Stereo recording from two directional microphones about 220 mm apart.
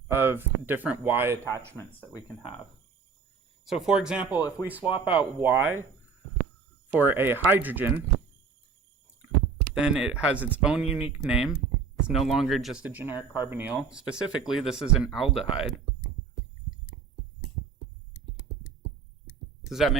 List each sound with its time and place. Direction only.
0.1 s speech: 10° right (ahead or behind)
1.9 s speech: 10° left (ahead or behind)
3.7 s speech: 5° right (ahead or behind)
4.4 s speech: 15° left (ahead or behind)
5.0 s speech: 5° right (ahead or behind)
6.9 s speech: 10° right (ahead or behind)
9.7 s speech: 5° right (ahead or behind)
19.6 s speech: centre (ahead or behind)